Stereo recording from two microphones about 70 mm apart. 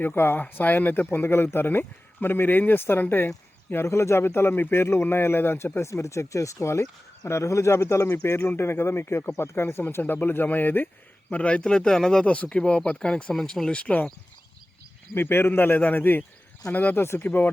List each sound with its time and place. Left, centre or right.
0.0 s a man's voice: left
11.3 s speech: centre
15.1 s a man's voice: left